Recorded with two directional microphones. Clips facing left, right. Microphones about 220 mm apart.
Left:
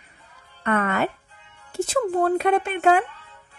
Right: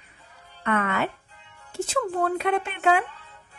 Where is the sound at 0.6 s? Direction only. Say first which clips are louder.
Left 3 dB; 45° left (ahead or behind).